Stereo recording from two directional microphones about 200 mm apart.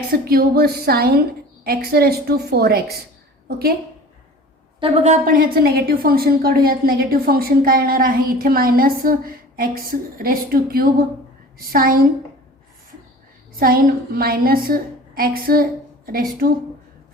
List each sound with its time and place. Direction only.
0.1 s a woman's voice: 50° right (ahead or behind)
4.8 s a woman's voice: 35° right (ahead or behind)
13.6 s a woman's voice: 45° right (ahead or behind)